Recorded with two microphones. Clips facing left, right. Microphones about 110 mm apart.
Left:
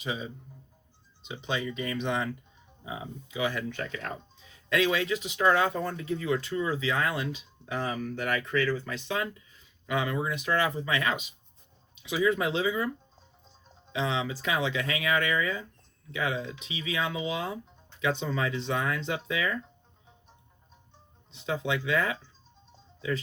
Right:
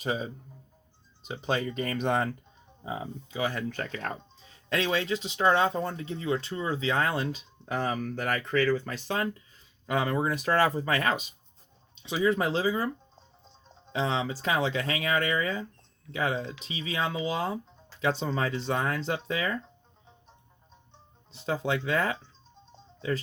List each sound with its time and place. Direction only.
0.0 s speech: 40° right (ahead or behind)
13.1 s music: centre (ahead or behind)
13.9 s speech: 35° right (ahead or behind)
21.3 s speech: 35° right (ahead or behind)